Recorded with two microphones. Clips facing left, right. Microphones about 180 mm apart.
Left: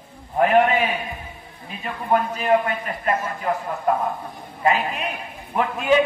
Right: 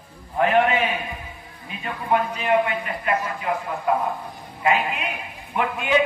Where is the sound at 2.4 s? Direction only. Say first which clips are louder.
Left 1 dB; 40° left (ahead or behind).